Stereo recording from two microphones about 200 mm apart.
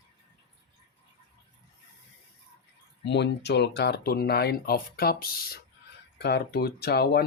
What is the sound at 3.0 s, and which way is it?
Speech, 60° left (ahead or behind).